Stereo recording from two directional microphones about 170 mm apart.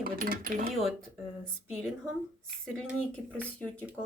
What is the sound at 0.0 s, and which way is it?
Speech, 55° right (ahead or behind).